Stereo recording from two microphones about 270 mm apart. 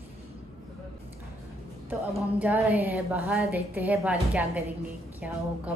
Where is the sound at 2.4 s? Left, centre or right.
Centre.